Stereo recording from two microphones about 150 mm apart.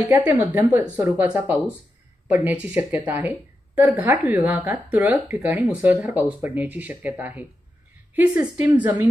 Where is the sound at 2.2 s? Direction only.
10° right (ahead or behind).